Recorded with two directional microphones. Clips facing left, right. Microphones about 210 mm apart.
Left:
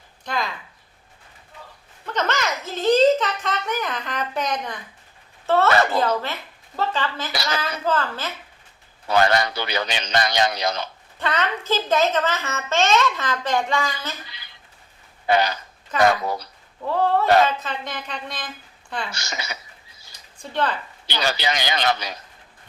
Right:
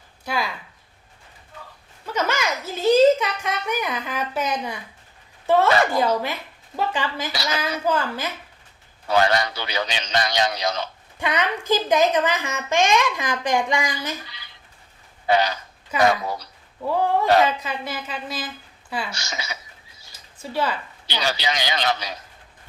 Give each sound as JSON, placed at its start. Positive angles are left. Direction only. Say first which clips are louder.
{"t": 0.3, "sound": "a child's voice", "louder": "right 1 dB", "side_deg": -10}
{"t": 2.1, "sound": "a child's voice", "louder": "even", "side_deg": -10}
{"t": 9.1, "sound": "a man's voice", "louder": "left 1 dB", "side_deg": 55}
{"t": 11.2, "sound": "a child's voice", "louder": "right 1 dB", "side_deg": -15}
{"t": 15.9, "sound": "a child's voice", "louder": "left 1 dB", "side_deg": -10}
{"t": 19.1, "sound": "a man's voice", "louder": "even", "side_deg": 55}
{"t": 20.1, "sound": "a sound", "louder": "even", "side_deg": -5}
{"t": 21.3, "sound": "a man's voice", "louder": "left 1 dB", "side_deg": 55}